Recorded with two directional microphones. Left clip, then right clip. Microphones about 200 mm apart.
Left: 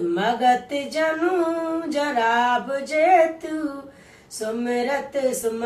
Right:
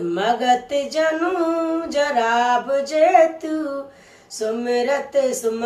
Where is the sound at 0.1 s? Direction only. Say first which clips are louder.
Right 2 dB; 35° right (ahead or behind).